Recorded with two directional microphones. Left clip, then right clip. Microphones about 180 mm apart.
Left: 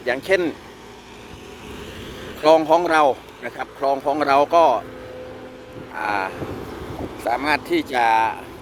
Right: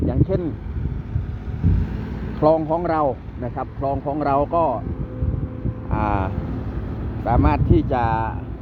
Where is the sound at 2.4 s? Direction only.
35° left (ahead or behind).